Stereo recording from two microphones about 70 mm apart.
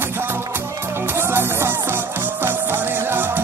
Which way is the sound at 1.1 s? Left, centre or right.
Right.